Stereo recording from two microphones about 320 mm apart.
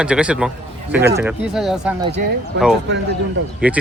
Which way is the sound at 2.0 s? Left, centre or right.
Centre.